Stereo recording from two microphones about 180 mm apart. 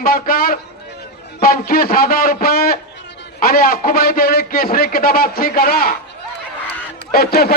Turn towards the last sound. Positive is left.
turn(degrees=60)  # may be behind; listen again after turning